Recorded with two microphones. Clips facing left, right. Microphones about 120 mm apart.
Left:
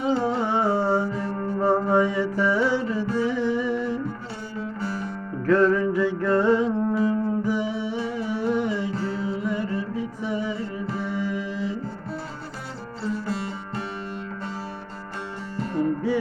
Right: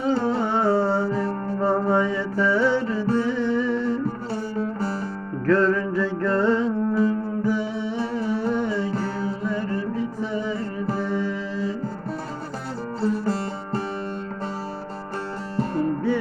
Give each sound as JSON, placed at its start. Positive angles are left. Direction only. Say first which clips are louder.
{"t": 0.0, "sound": "carnatic music", "louder": "right 1 dB", "side_deg": -40}
{"t": 0.4, "sound": "humming", "louder": "right 2 dB", "side_deg": 15}
{"t": 1.6, "sound": "music", "louder": "even", "side_deg": 15}
{"t": 4.6, "sound": "music", "louder": "right 3 dB", "side_deg": -40}
{"t": 5.5, "sound": "music", "louder": "left 1 dB", "side_deg": 15}
{"t": 8.9, "sound": "music", "louder": "right 1 dB", "side_deg": -40}
{"t": 9.5, "sound": "music", "louder": "right 1 dB", "side_deg": 15}
{"t": 13.0, "sound": "music", "louder": "right 4 dB", "side_deg": -40}